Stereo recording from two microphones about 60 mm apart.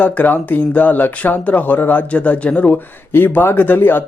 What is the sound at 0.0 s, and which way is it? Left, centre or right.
Speech, left.